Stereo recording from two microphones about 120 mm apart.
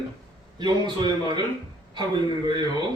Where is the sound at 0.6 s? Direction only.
40° right (ahead or behind).